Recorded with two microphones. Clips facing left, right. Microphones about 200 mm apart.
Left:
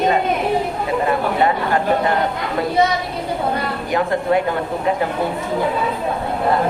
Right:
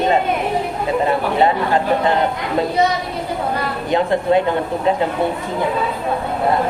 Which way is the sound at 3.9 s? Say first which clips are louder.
Right 2 dB; 25° right (ahead or behind).